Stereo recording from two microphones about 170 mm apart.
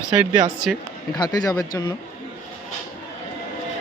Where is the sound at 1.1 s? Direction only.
25° left (ahead or behind).